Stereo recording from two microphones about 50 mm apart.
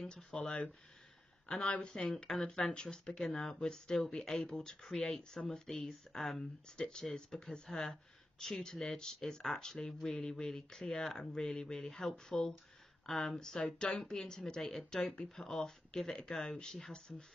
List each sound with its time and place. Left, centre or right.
0.0 s speech: centre
4.8 s speech: centre